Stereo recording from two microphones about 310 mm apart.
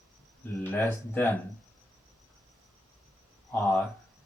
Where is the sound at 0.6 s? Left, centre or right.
Centre.